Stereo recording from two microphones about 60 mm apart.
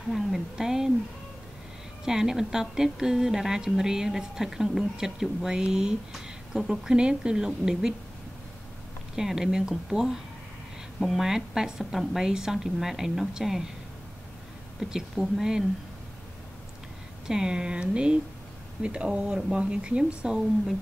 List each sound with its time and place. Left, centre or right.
0.1 s a woman's voice: centre
2.0 s a woman's voice: centre
9.1 s a woman's voice: centre
14.8 s a woman's voice: centre
17.3 s a woman's voice: centre